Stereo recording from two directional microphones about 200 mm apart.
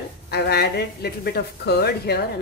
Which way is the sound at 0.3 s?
55° left (ahead or behind).